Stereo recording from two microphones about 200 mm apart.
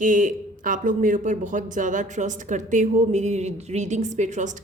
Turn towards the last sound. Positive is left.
turn(degrees=-35)  # may be behind; listen again after turning